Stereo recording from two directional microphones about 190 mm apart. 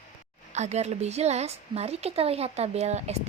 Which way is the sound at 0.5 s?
35° right (ahead or behind).